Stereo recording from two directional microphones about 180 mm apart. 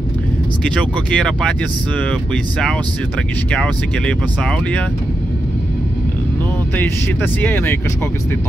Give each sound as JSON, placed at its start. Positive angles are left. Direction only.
{"t": 0.7, "sound": "speech", "side_deg": 5}
{"t": 3.5, "sound": "speech", "side_deg": 5}
{"t": 6.8, "sound": "speech", "side_deg": 10}